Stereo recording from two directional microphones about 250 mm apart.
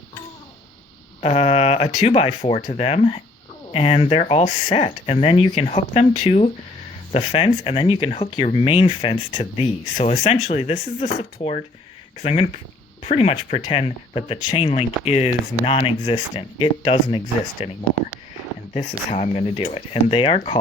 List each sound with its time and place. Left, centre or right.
1.2 s speech: left
18.7 s speech: left